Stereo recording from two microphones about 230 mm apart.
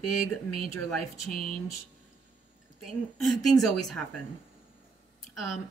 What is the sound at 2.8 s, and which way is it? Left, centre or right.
Speech, centre.